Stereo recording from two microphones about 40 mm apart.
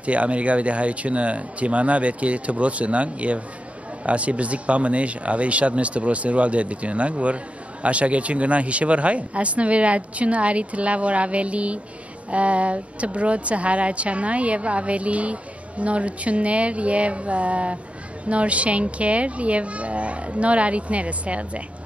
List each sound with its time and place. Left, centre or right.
0.0 s speech: right